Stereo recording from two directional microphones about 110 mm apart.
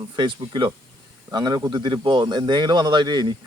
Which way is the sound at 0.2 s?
45° right (ahead or behind).